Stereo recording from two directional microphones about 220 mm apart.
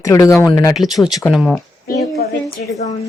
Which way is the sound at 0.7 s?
Centre (ahead or behind).